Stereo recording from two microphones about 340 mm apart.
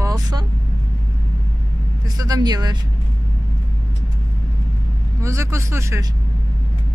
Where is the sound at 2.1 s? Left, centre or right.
Centre.